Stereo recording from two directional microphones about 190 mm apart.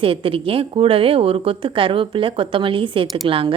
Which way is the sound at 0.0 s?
30° right (ahead or behind).